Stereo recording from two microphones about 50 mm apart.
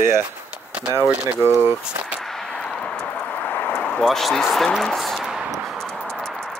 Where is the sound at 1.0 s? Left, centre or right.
Right.